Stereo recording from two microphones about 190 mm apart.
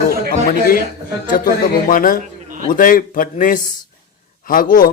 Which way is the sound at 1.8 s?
45° left (ahead or behind).